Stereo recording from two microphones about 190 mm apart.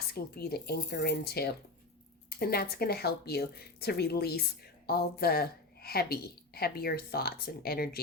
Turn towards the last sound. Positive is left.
turn(degrees=55)  # may be behind; listen again after turning